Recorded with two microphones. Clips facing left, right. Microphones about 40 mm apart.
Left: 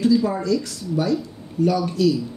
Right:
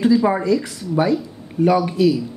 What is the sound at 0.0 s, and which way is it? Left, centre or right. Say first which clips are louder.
Speech: right 3 dB; right.